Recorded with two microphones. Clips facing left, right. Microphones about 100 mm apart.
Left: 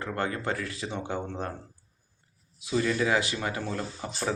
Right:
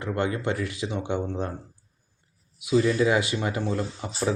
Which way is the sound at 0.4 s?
25° right (ahead or behind).